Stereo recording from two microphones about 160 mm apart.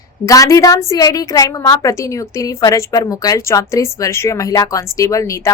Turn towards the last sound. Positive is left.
turn(degrees=20)  # may be behind; listen again after turning